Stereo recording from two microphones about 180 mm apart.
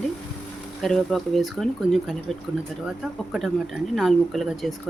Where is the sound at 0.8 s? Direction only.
Centre (ahead or behind).